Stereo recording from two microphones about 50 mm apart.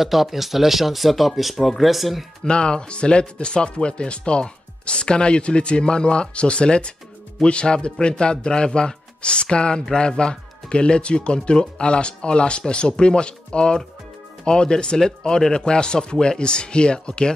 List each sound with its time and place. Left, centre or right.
0.0 s speech: centre
2.4 s speech: centre